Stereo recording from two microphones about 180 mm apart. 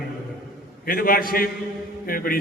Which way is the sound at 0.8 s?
55° left (ahead or behind).